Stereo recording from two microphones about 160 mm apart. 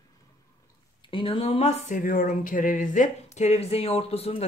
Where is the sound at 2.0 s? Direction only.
60° left (ahead or behind).